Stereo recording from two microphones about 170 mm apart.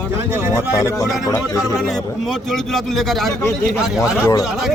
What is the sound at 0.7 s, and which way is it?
Speech, 20° left (ahead or behind).